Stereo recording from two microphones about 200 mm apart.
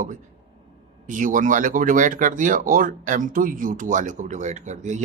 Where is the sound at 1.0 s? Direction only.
40° right (ahead or behind).